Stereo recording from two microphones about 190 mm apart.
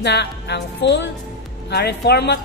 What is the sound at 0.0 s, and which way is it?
Speech, 65° left (ahead or behind).